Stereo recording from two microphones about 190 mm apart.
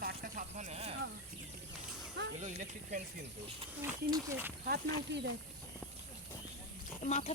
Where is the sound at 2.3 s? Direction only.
40° right (ahead or behind).